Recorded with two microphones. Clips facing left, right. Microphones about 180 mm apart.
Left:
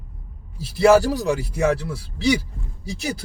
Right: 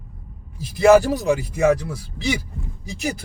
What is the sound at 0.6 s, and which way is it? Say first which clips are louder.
Speech: right 1 dB; 20° right (ahead or behind).